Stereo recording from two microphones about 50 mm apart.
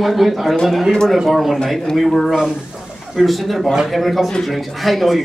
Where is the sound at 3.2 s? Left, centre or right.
Centre.